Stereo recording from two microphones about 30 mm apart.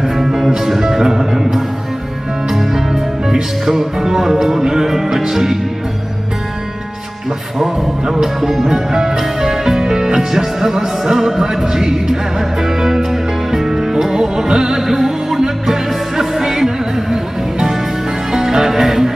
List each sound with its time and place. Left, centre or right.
0.0 s music: centre
7.6 s music: centre